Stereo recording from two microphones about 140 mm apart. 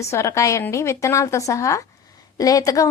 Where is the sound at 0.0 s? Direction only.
20° left (ahead or behind).